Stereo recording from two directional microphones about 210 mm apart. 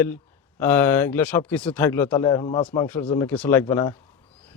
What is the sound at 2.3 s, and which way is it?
A man's voice, 20° left (ahead or behind).